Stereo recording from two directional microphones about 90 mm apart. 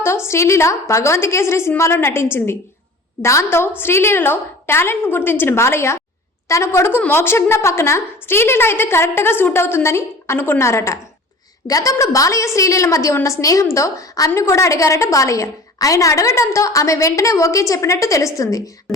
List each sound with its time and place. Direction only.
0.3 s a woman's voice: 30° left (ahead or behind)